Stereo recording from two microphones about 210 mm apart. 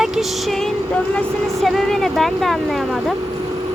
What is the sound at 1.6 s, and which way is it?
Speech, centre (ahead or behind).